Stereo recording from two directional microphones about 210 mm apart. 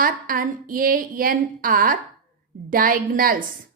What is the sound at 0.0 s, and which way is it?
A woman's voice, 40° right (ahead or behind).